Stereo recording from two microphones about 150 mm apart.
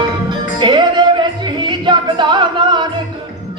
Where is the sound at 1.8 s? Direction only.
30° right (ahead or behind).